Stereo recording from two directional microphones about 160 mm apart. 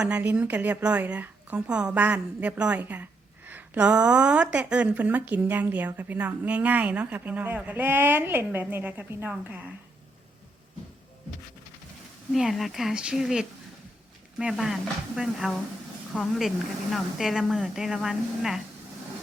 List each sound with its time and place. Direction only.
0.0 s a woman's voice: 10° right (ahead or behind)
12.3 s speech: centre (ahead or behind)